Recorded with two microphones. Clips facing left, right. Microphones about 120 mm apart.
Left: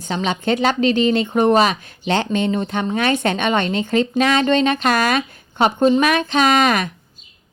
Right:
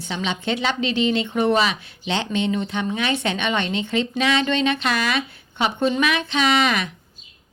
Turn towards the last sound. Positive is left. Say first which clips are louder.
# left 4 dB
turn(degrees=45)  # may be behind; listen again after turning